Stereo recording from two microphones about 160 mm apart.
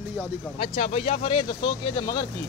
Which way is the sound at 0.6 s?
40° left (ahead or behind).